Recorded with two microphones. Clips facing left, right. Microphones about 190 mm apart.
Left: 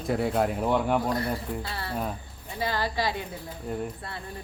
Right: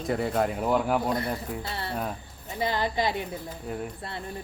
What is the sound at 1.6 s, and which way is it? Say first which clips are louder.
Speech: even; 25° right (ahead or behind).